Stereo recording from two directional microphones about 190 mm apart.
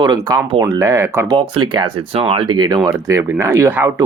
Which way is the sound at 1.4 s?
25° right (ahead or behind).